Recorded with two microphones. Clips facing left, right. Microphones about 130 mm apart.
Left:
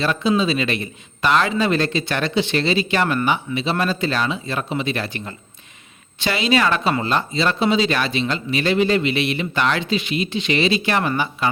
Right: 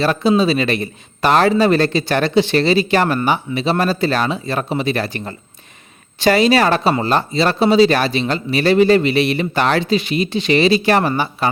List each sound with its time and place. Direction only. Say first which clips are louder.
0.0 s a man's voice: right 4 dB; 35° right (ahead or behind)